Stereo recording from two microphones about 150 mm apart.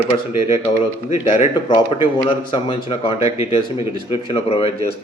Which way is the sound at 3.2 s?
20° right (ahead or behind).